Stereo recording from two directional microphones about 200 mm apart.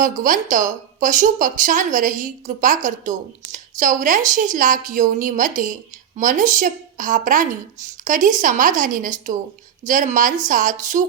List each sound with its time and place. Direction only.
0.0 s speech: 40° right (ahead or behind)